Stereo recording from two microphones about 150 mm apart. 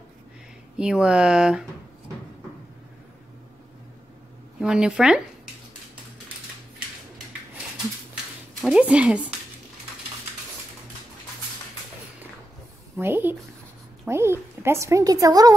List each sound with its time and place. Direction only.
0.7 s speech: 5° right (ahead or behind)
4.6 s speech: 5° right (ahead or behind)
8.5 s speech: 5° right (ahead or behind)
13.0 s a woman's voice: 15° right (ahead or behind)